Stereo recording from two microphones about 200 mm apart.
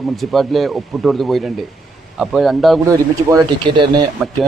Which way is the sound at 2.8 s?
15° right (ahead or behind).